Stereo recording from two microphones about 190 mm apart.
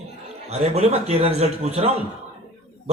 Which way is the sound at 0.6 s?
35° right (ahead or behind).